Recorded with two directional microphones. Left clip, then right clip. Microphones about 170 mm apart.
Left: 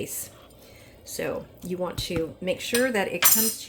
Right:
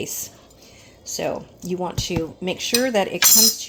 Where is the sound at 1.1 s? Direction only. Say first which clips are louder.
Right 5 dB; 30° right (ahead or behind).